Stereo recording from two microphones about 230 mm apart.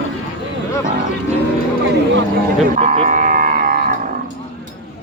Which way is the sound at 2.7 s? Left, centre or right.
Right.